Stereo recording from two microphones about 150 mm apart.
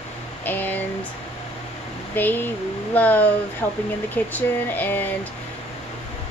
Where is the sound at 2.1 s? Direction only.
10° left (ahead or behind).